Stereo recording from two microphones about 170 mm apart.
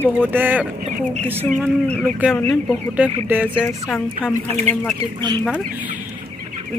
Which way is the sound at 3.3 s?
10° right (ahead or behind).